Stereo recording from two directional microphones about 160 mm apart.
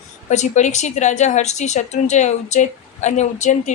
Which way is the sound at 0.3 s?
45° left (ahead or behind).